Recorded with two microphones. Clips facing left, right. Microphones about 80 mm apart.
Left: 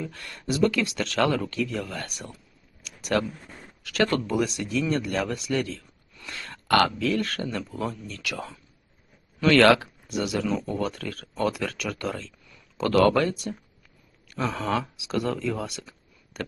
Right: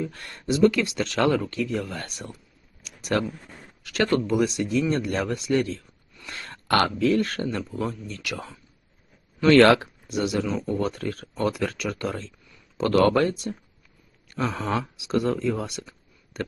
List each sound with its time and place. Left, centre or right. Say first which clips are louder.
0.1 s speech: right 3 dB; right
2.8 s a sound: even; right
3.8 s speech: right 2 dB; right